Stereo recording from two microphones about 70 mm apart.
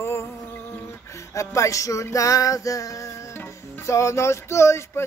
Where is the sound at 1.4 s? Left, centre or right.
Left.